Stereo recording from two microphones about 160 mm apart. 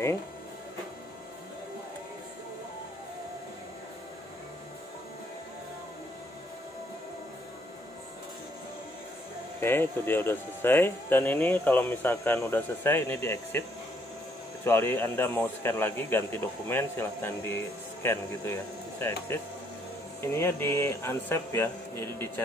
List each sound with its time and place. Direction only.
9.6 s speech: 15° left (ahead or behind)